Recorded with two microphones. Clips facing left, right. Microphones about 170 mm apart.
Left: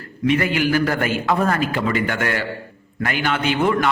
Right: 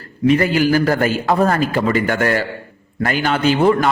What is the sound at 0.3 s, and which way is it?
A man's voice, 35° right (ahead or behind).